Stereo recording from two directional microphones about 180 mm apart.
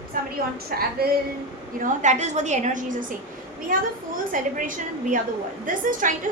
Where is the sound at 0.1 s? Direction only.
50° right (ahead or behind).